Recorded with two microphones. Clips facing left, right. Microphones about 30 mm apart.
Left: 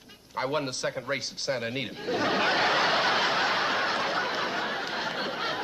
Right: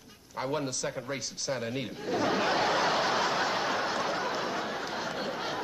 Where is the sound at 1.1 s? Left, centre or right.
Left.